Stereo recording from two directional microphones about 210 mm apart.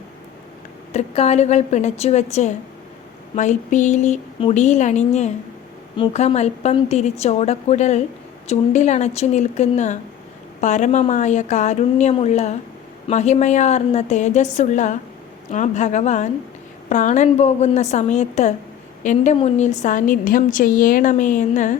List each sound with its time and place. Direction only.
0.9 s a woman's voice: 30° left (ahead or behind)